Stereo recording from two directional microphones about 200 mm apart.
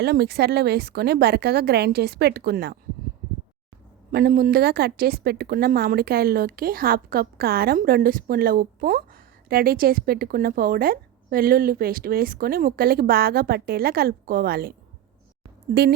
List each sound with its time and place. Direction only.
0.0 s a woman's voice: 55° right (ahead or behind)
4.1 s a woman's voice: 45° right (ahead or behind)